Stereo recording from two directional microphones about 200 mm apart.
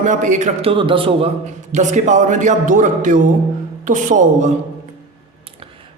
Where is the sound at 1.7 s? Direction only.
35° right (ahead or behind).